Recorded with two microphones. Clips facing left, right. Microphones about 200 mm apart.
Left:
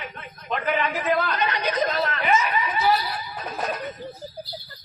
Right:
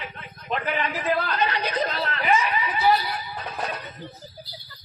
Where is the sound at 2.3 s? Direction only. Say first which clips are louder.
Right 1 dB; 30° right (ahead or behind).